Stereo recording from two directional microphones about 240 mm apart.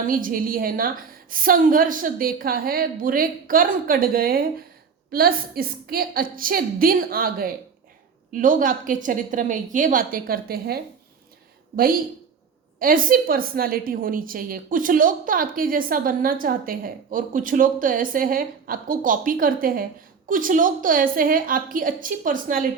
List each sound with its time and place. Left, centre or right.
0.1 s a woman's voice: right
11.8 s a woman's voice: right